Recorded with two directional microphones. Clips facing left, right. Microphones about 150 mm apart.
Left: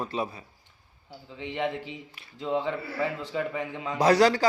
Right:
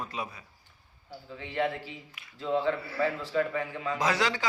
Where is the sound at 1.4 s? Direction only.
20° left (ahead or behind).